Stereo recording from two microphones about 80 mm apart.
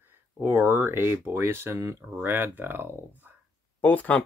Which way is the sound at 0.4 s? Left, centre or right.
Right.